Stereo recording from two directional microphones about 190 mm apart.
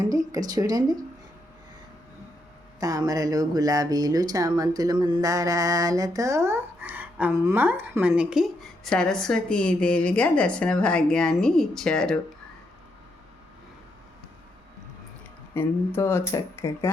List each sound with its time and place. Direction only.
0.0 s speech: 20° right (ahead or behind)
2.8 s speech: 20° right (ahead or behind); by 12.2 s 5° left (ahead or behind)
15.5 s speech: 10° left (ahead or behind)